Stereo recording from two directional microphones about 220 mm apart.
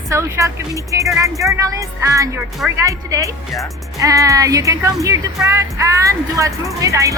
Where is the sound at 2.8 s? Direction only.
15° right (ahead or behind).